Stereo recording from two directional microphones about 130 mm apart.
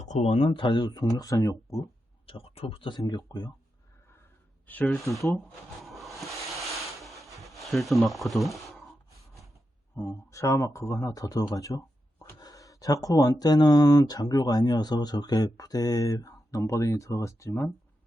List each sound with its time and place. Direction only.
0.0 s speech: 60° left (ahead or behind); by 1.8 s 25° left (ahead or behind)
2.2 s speech: 45° left (ahead or behind)
4.6 s speech: 10° left (ahead or behind)
5.8 s a sound: centre (ahead or behind)
10.0 s speech: 25° left (ahead or behind)